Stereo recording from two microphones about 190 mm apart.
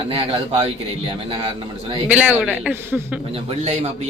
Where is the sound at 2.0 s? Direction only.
10° right (ahead or behind).